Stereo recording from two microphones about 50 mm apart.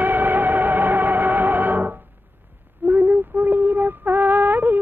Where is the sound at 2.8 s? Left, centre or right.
Right.